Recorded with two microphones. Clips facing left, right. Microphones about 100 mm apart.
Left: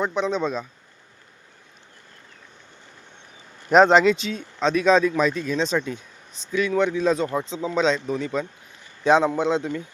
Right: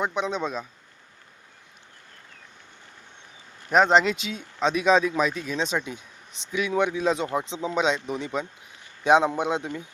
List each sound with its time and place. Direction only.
0.0 s speech: 5° right (ahead or behind)
3.7 s speech: 30° left (ahead or behind)
3.9 s speech: 5° right (ahead or behind)